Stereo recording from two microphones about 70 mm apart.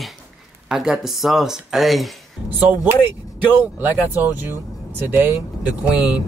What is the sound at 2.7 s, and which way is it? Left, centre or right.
Speech, right.